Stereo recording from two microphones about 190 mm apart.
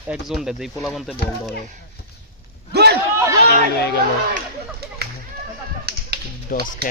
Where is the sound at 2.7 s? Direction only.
60° right (ahead or behind).